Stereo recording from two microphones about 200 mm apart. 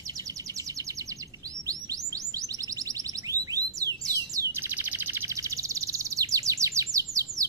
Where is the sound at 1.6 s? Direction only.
15° right (ahead or behind).